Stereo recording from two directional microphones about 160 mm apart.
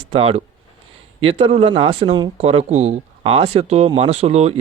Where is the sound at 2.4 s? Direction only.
40° right (ahead or behind).